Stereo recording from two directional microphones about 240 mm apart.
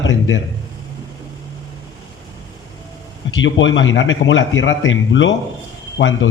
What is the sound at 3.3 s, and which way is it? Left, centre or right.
A man's voice, left.